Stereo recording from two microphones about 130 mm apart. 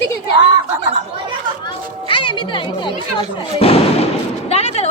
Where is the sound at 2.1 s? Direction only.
40° left (ahead or behind).